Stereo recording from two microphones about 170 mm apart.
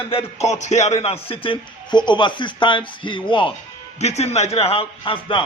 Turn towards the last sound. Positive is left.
turn(degrees=30)  # may be behind; listen again after turning